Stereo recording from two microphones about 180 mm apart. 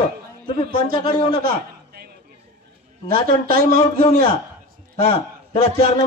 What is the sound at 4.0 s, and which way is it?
Speech, 30° left (ahead or behind).